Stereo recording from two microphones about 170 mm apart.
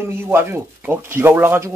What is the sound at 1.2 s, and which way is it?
Speech, 15° right (ahead or behind).